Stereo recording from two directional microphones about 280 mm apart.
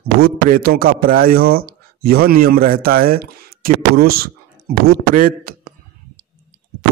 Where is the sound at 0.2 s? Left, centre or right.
Right.